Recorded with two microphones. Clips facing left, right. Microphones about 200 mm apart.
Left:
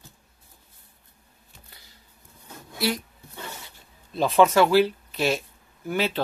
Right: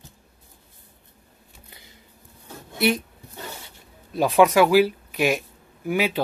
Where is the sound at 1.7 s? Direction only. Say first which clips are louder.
Right 5 dB; 20° right (ahead or behind).